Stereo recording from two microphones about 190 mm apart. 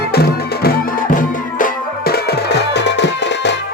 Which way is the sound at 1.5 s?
50° left (ahead or behind).